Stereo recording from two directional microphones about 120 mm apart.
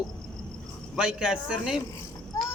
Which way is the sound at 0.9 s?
5° right (ahead or behind).